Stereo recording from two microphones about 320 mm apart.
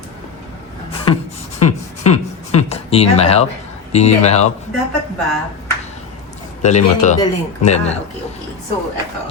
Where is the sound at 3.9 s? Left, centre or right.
Centre.